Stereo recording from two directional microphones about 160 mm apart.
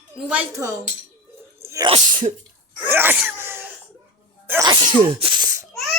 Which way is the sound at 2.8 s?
10° right (ahead or behind).